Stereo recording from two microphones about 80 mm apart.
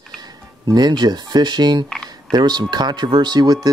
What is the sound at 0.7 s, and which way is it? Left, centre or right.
Speech, right.